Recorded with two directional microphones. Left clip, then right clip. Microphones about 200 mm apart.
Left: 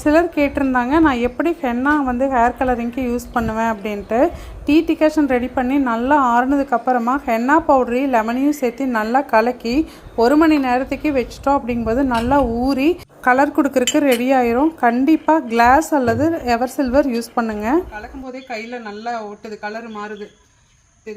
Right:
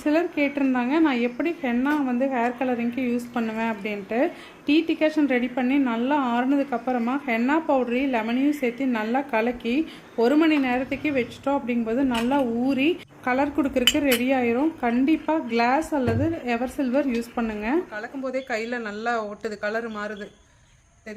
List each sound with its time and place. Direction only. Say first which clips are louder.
0.0 s a woman's voice: left 8 dB; 20° left (ahead or behind)
18.4 s speech: even; 25° right (ahead or behind)